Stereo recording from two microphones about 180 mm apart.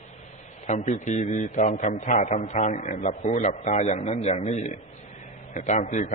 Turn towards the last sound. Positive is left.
turn(degrees=45)  # may be behind; listen again after turning